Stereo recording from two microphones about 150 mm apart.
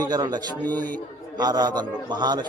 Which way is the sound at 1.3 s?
25° right (ahead or behind).